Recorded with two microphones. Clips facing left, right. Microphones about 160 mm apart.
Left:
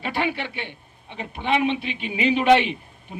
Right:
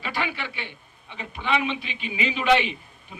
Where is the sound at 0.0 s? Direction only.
60° left (ahead or behind).